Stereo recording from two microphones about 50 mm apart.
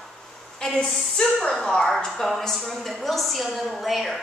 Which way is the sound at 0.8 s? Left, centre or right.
Centre.